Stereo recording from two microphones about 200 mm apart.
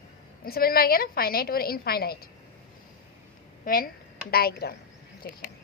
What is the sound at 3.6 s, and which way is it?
A woman's voice, 45° left (ahead or behind).